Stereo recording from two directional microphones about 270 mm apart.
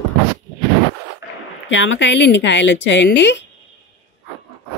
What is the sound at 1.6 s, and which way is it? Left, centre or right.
A woman's voice, left.